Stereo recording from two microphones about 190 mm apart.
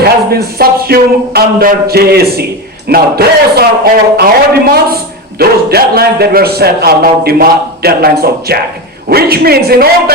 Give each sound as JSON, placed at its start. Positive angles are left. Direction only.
{"t": 0.0, "sound": "a man's voice", "side_deg": -55}
{"t": 5.4, "sound": "a man's voice", "side_deg": -55}